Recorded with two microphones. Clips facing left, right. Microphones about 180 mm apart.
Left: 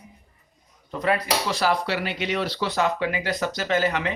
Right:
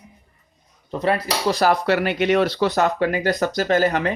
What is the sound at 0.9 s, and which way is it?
Speech, 30° right (ahead or behind).